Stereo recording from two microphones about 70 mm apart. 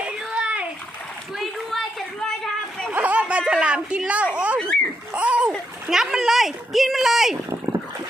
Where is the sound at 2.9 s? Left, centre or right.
Right.